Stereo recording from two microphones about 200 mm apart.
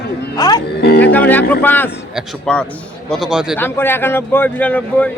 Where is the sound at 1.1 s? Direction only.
10° left (ahead or behind).